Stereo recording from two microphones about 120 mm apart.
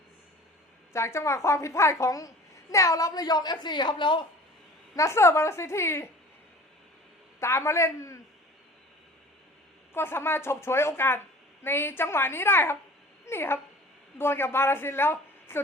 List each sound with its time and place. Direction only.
0.9 s a woman's voice: 25° left (ahead or behind); by 4.2 s 40° left (ahead or behind)
4.9 s a woman's voice: 25° left (ahead or behind)
7.3 s a man's voice: 20° left (ahead or behind)
9.9 s a woman's voice: 20° left (ahead or behind)